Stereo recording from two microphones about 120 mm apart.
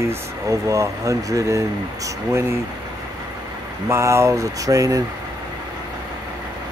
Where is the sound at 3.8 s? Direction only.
25° right (ahead or behind).